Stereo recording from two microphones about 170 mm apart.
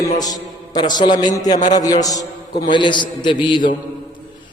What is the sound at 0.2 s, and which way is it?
A man's voice, 25° left (ahead or behind).